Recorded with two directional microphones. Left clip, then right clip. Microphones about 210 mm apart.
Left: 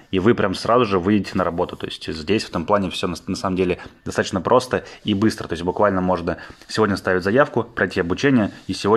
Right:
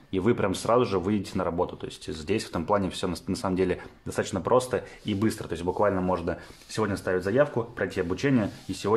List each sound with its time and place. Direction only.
0.1 s speech: 15° left (ahead or behind)